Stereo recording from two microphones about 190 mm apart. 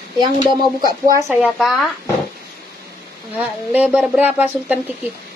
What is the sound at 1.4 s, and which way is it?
Speech, centre (ahead or behind).